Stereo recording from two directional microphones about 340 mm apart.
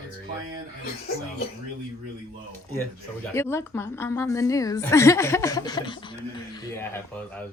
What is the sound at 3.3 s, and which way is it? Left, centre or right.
A woman's voice, centre.